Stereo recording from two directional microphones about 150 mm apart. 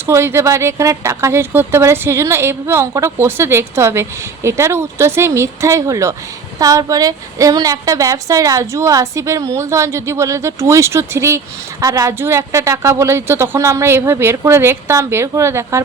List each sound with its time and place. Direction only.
0.0 s a woman's voice: 15° right (ahead or behind)